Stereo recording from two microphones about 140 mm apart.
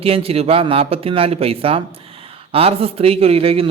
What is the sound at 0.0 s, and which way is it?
Speech, 45° right (ahead or behind).